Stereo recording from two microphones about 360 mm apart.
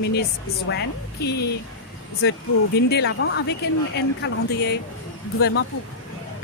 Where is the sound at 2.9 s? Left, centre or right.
Left.